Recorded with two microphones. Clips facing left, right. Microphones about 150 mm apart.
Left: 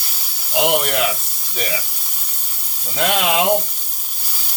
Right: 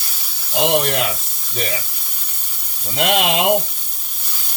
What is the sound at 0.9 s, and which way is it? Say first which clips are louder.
Speech: left 1 dB; 35° right (ahead or behind).